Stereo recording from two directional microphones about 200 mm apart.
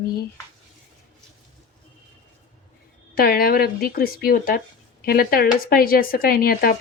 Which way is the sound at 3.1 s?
50° left (ahead or behind).